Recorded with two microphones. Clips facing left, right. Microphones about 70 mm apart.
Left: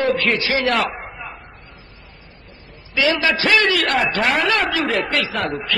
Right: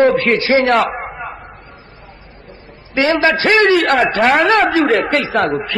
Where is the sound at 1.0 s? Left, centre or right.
Right.